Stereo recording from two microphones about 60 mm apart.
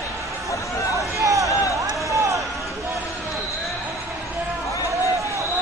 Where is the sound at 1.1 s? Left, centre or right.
Right.